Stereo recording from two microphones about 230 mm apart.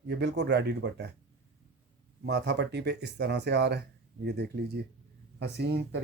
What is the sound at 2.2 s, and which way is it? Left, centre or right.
Speech, right.